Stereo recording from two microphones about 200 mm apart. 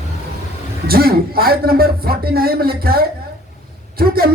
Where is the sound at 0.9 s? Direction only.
50° right (ahead or behind).